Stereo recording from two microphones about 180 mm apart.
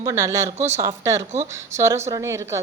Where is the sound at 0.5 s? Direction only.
40° right (ahead or behind).